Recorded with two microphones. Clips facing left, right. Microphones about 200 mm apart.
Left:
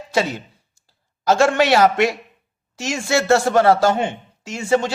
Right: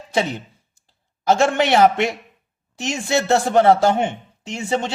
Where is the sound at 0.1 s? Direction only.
20° right (ahead or behind).